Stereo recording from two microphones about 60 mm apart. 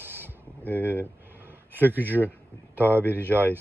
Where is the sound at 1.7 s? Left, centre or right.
Right.